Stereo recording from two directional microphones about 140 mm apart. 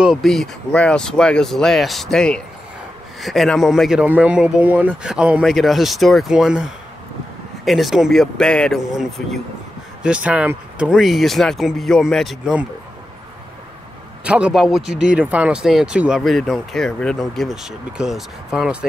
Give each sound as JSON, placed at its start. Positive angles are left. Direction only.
{"t": 0.0, "sound": "speech", "side_deg": 0}
{"t": 4.0, "sound": "speech", "side_deg": -10}
{"t": 14.2, "sound": "speech", "side_deg": -10}